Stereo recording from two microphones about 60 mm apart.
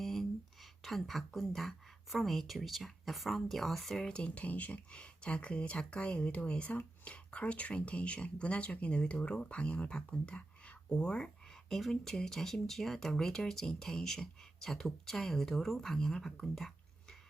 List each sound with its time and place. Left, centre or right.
0.0 s a sound: centre
0.8 s speech: centre
4.0 s speech: centre